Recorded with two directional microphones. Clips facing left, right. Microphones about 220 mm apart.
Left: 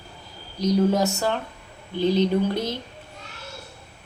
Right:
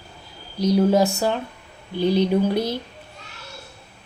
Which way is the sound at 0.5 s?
10° right (ahead or behind).